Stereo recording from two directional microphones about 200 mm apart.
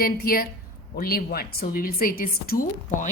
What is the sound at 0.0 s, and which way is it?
A woman's voice, 45° left (ahead or behind).